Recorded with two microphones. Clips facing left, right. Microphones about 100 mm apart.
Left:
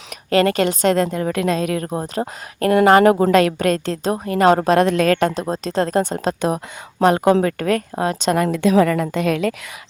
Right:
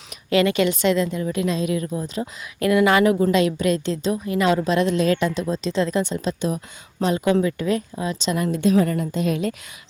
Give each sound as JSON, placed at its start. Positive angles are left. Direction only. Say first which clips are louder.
{"t": 0.3, "sound": "a woman's voice", "louder": "left 2 dB", "side_deg": 45}
{"t": 3.3, "sound": "a woman's voice", "louder": "left 4 dB", "side_deg": 50}
{"t": 8.4, "sound": "a woman's voice", "louder": "left 2 dB", "side_deg": 80}